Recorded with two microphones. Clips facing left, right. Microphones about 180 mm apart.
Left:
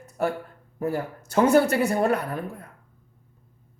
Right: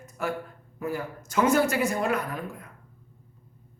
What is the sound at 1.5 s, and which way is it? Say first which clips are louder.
Speech: left 4 dB; 65° left (ahead or behind).